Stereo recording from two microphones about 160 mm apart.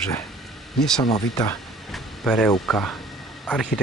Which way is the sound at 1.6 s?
Centre (ahead or behind).